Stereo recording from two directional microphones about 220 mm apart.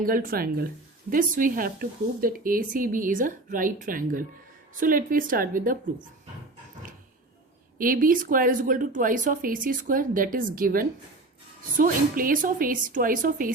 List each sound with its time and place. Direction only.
0.0 s speech: 40° right (ahead or behind)
7.8 s speech: 40° right (ahead or behind)